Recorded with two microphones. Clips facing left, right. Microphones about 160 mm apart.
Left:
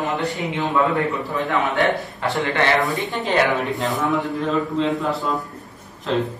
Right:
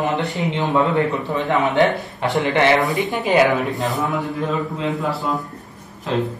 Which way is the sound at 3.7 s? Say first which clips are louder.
Even; centre (ahead or behind).